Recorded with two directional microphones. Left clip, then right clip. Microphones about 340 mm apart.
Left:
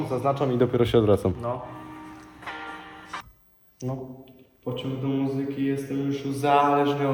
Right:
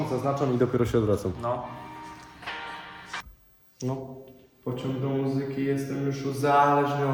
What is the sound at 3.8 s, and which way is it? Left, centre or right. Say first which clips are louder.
Speech: right 1 dB; centre.